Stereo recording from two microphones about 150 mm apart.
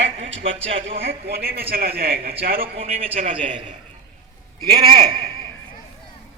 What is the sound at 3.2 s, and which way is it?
Speech, 55° right (ahead or behind).